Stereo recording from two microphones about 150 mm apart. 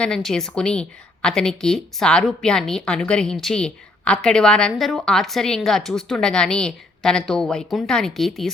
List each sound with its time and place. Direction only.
0.0 s a woman's voice: 5° left (ahead or behind)